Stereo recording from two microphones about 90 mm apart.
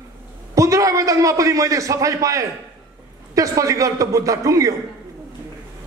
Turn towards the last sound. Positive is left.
turn(degrees=-35)  # may be behind; listen again after turning